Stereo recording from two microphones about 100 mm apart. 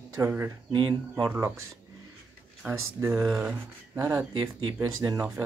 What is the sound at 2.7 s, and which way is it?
Speech, 25° right (ahead or behind).